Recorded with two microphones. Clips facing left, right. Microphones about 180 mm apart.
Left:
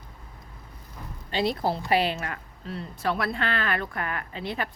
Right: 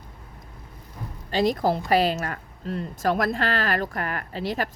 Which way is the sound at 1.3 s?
45° right (ahead or behind).